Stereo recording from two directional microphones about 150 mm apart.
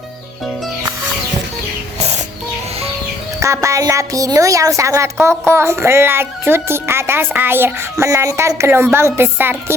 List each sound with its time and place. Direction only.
3.4 s a woman's voice: 20° right (ahead or behind)